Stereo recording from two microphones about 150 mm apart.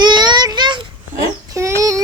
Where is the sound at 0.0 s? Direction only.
30° right (ahead or behind).